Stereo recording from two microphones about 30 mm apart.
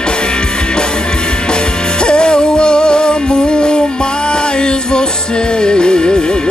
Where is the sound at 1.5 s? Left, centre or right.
Left.